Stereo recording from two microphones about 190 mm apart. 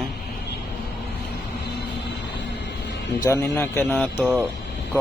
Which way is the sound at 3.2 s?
15° left (ahead or behind).